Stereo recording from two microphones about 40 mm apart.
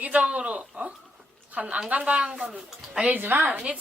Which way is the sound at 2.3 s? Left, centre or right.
Centre.